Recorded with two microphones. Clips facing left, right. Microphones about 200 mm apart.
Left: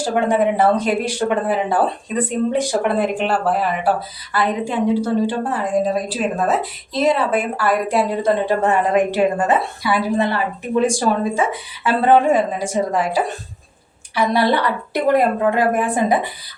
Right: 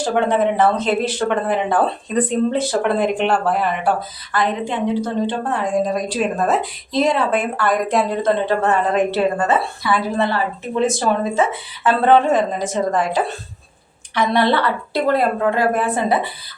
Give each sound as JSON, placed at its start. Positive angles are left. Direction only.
{"t": 0.0, "sound": "a woman's voice", "side_deg": 10}
{"t": 11.3, "sound": "a woman's voice", "side_deg": 10}